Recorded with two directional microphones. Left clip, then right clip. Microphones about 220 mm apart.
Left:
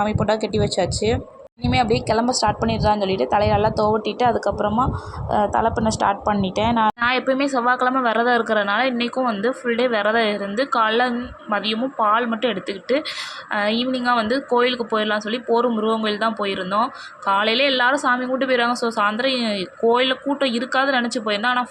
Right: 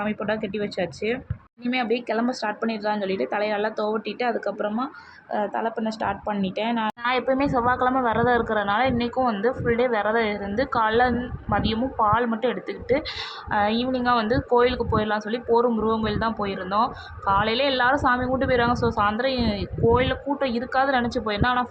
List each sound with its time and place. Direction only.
0.0 s a woman's voice: 20° left (ahead or behind)